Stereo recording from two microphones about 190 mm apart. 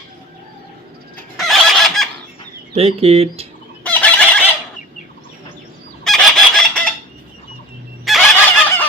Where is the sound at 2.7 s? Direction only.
35° right (ahead or behind).